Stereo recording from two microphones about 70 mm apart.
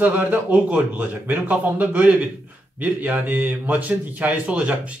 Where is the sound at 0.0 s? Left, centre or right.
Right.